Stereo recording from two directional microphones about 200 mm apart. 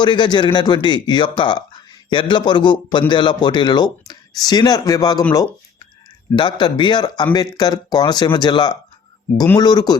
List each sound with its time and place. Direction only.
0.0 s a man's voice: 25° left (ahead or behind)